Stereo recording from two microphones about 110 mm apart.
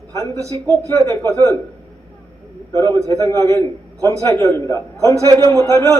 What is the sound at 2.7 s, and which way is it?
Speech, 35° right (ahead or behind).